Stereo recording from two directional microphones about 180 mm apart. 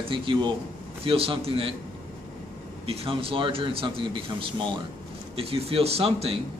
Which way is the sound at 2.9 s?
30° right (ahead or behind).